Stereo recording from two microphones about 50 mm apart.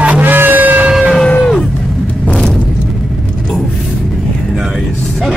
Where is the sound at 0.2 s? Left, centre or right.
Right.